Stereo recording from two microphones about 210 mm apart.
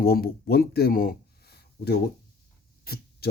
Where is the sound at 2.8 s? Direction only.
45° left (ahead or behind).